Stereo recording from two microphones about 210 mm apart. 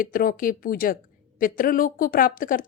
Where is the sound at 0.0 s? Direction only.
40° left (ahead or behind).